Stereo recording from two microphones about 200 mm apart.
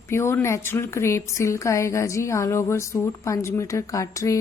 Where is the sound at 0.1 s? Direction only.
15° left (ahead or behind).